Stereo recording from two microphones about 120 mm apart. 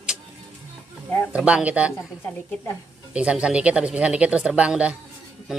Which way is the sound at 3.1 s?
10° right (ahead or behind).